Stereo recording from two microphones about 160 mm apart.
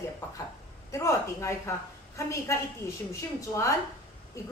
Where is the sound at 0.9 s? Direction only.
20° left (ahead or behind).